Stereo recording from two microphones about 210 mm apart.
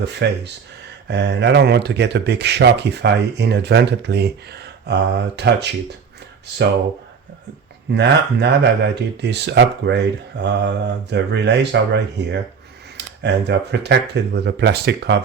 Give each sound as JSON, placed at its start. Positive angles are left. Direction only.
{"t": 0.0, "sound": "speech", "side_deg": -55}
{"t": 7.9, "sound": "speech", "side_deg": -55}